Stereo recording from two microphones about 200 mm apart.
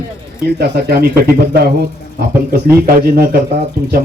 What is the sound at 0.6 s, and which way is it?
Speech, 50° right (ahead or behind).